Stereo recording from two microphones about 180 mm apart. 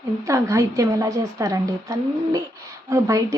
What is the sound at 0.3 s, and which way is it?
A woman's voice, 15° right (ahead or behind).